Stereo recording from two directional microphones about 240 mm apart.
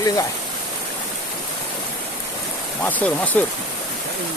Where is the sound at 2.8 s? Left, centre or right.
Centre.